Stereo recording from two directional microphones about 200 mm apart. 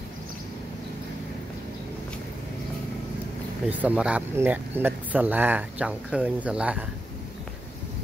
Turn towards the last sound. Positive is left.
turn(degrees=-5)  # may be behind; listen again after turning